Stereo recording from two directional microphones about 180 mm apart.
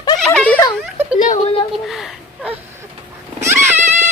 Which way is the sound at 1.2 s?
45° left (ahead or behind).